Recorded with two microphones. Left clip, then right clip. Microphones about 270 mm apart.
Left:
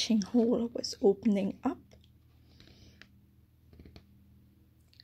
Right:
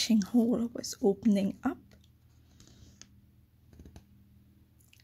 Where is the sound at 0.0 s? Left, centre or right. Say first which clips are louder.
Even; right.